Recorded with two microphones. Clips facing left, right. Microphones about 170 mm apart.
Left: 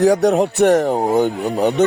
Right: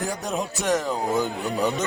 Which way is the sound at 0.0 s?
75° left (ahead or behind).